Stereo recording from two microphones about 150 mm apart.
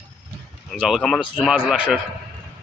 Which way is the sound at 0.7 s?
5° right (ahead or behind).